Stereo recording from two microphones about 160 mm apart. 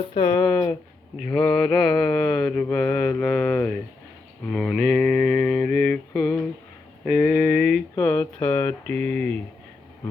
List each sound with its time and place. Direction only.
0.1 s speech: 35° left (ahead or behind)
0.3 s mantra: 5° left (ahead or behind)
7.9 s speech: 10° left (ahead or behind)